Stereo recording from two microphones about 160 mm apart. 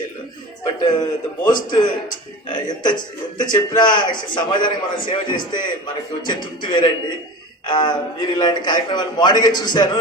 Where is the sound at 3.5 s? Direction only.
25° left (ahead or behind).